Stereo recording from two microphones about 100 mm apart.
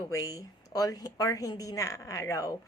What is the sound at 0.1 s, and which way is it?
A woman's voice, 35° left (ahead or behind).